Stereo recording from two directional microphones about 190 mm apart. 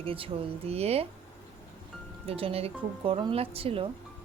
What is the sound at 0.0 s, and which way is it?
Speech, 30° right (ahead or behind).